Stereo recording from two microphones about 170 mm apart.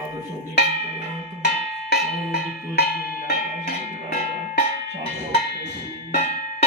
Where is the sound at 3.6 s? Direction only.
60° left (ahead or behind).